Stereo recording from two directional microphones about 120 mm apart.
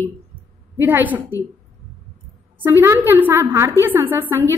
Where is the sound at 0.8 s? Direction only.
15° right (ahead or behind).